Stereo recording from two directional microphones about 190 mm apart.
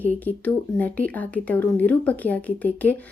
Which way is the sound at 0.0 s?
10° left (ahead or behind).